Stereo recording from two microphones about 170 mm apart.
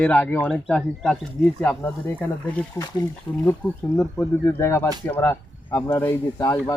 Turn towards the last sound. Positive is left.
turn(degrees=20)  # may be behind; listen again after turning